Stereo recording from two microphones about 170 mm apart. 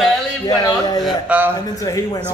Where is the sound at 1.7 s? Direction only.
20° left (ahead or behind).